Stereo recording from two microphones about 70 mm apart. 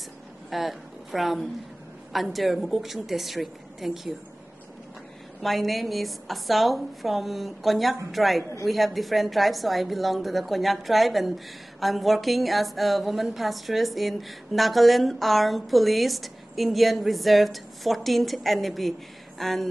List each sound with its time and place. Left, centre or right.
0.5 s a woman's voice: centre
5.4 s a woman's voice: centre